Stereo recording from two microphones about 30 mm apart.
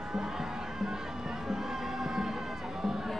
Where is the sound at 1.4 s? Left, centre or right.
Centre.